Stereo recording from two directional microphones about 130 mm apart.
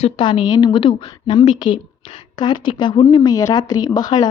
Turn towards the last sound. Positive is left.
turn(degrees=35)  # may be behind; listen again after turning